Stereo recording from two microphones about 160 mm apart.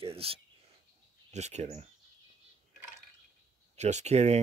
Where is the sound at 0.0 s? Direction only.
35° right (ahead or behind).